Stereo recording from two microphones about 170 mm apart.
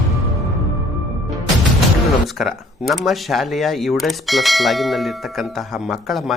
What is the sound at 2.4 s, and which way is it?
Speech, centre (ahead or behind).